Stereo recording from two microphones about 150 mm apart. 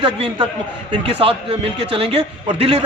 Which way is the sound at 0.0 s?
35° right (ahead or behind).